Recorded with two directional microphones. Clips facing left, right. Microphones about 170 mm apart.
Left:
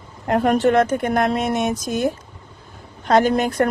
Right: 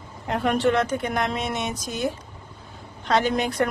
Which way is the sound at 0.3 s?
45° left (ahead or behind).